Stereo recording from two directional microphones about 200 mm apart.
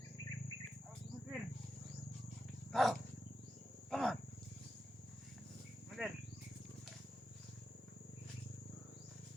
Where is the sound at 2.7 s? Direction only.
Centre (ahead or behind).